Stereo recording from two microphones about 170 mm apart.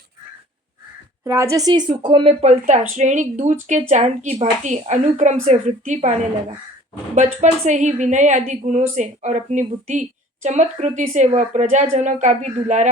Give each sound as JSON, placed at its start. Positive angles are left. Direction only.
{"t": 1.2, "sound": "a woman's voice", "side_deg": -15}
{"t": 7.4, "sound": "a woman's voice", "side_deg": -45}